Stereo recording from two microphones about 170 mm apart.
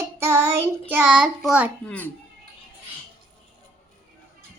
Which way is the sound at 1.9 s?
10° left (ahead or behind).